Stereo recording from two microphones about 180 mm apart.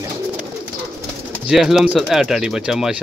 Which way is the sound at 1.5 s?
5° right (ahead or behind).